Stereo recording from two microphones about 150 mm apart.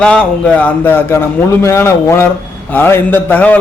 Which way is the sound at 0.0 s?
5° left (ahead or behind).